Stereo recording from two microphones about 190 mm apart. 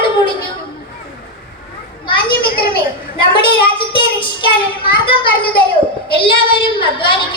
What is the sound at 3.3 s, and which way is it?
Child singing, 25° left (ahead or behind).